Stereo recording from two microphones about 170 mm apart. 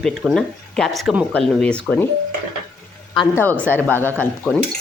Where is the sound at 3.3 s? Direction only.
10° left (ahead or behind).